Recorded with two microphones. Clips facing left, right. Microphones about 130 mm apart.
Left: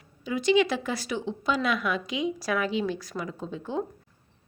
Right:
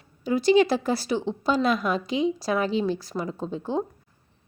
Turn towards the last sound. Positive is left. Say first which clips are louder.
# right 4 dB
turn(degrees=-35)  # may be behind; listen again after turning